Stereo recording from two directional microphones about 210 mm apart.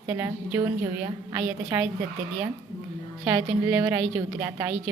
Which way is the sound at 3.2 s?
10° right (ahead or behind).